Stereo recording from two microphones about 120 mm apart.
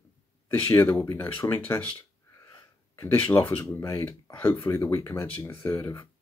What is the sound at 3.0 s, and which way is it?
Speech, 25° left (ahead or behind).